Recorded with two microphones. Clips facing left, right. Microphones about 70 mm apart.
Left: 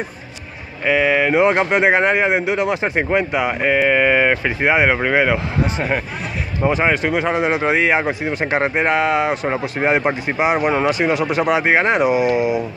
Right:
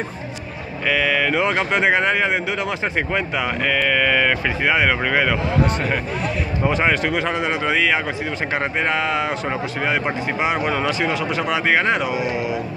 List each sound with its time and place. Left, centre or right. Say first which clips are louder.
0.8 s speech: left 4 dB; left
9.5 s speech: left 4 dB; left
10.0 s speech: left 3 dB; centre